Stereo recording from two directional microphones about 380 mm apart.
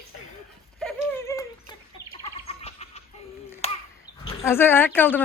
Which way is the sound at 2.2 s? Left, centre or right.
Centre.